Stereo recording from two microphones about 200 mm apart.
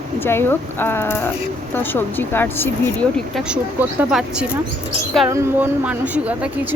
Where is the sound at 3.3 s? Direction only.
5° right (ahead or behind).